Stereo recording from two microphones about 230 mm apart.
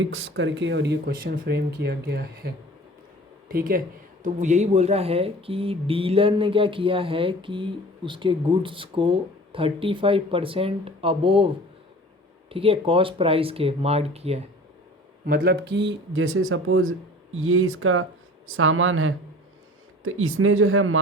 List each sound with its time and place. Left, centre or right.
0.0 s speech: right
3.5 s speech: right
15.3 s speech: right
15.7 s speech: right